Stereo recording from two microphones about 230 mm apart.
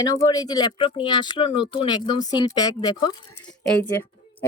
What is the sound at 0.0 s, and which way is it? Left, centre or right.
Speech, centre.